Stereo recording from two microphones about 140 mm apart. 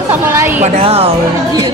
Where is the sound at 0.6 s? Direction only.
50° right (ahead or behind).